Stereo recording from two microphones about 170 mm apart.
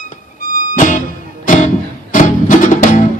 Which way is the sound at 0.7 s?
50° left (ahead or behind).